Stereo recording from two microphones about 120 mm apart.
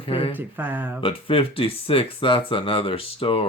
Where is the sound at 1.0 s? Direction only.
50° left (ahead or behind).